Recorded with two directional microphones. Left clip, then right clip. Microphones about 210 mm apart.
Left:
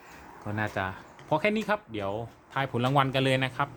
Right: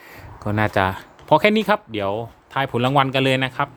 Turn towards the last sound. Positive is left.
turn(degrees=-25)  # may be behind; listen again after turning